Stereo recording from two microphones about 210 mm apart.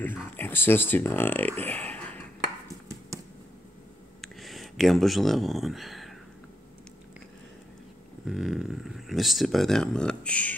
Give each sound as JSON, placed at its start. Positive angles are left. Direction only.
{"t": 0.0, "sound": "speech", "side_deg": 10}
{"t": 4.2, "sound": "a sound", "side_deg": 0}
{"t": 8.3, "sound": "speech", "side_deg": 0}